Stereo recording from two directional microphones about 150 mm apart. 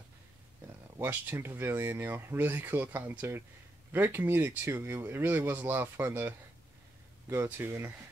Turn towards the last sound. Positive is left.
turn(degrees=-15)  # may be behind; listen again after turning